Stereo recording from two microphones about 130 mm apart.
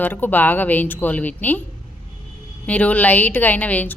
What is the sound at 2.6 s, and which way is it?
A woman's voice, 10° left (ahead or behind).